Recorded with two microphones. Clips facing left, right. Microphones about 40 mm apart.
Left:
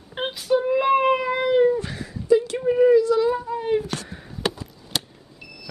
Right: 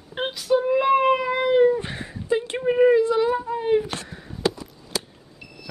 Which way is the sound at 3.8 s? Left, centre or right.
Right.